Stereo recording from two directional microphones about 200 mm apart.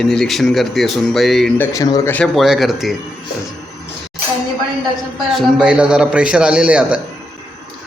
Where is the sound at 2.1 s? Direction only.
Centre (ahead or behind).